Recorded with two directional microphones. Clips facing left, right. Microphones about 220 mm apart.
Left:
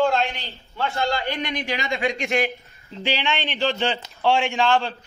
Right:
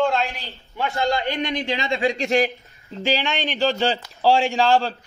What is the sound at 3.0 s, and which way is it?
A man's voice, 45° right (ahead or behind).